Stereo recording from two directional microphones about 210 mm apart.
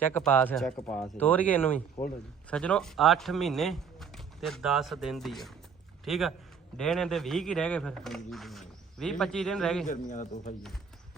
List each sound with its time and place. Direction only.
0.0 s a man's voice: 10° left (ahead or behind)
9.8 s a man's voice: 35° left (ahead or behind)